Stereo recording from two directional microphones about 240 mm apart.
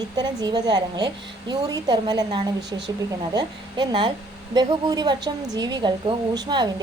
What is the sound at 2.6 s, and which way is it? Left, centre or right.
Speech, right.